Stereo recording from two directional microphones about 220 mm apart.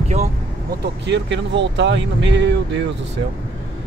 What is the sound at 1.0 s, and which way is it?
Speech, 55° right (ahead or behind).